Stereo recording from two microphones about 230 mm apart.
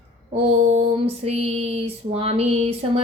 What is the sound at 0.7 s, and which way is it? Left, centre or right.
Female singing, right.